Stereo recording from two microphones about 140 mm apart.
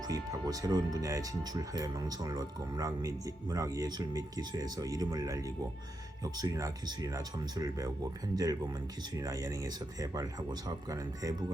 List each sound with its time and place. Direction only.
0.0 s speech: 25° right (ahead or behind)